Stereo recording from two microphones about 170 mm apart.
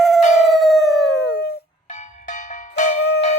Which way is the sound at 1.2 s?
75° left (ahead or behind).